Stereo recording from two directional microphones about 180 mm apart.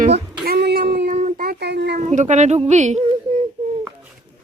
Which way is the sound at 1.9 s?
45° right (ahead or behind).